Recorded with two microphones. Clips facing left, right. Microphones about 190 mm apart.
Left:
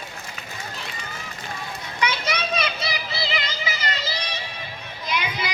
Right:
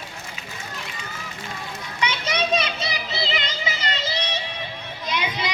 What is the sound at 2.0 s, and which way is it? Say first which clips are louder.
Children playing: right 1 dB; 25° right (ahead or behind).